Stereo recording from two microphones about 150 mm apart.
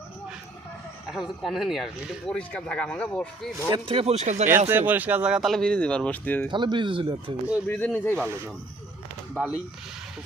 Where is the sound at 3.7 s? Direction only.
35° right (ahead or behind).